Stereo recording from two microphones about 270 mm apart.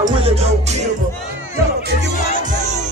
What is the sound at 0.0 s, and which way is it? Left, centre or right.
Music, right.